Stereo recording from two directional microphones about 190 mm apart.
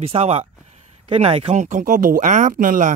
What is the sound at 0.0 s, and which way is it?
Speech, 30° right (ahead or behind).